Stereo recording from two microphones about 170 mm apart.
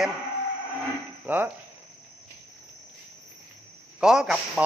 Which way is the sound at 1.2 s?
10° right (ahead or behind).